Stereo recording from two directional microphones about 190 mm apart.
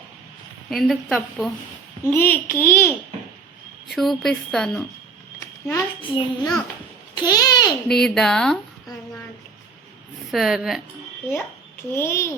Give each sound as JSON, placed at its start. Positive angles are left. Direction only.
{"t": 0.7, "sound": "speech", "side_deg": 0}
{"t": 2.0, "sound": "a child's voice", "side_deg": 10}
{"t": 3.8, "sound": "speech", "side_deg": 0}
{"t": 6.0, "sound": "a child's voice", "side_deg": 25}
{"t": 7.9, "sound": "speech", "side_deg": 0}
{"t": 10.3, "sound": "speech", "side_deg": 0}
{"t": 11.9, "sound": "a child's voice", "side_deg": 15}